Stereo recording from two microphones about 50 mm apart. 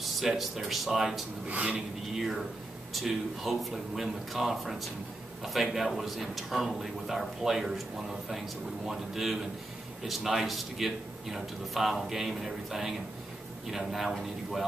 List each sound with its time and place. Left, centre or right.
0.0 s a man's voice: centre
1.5 s speech: right
2.1 s a man's voice: centre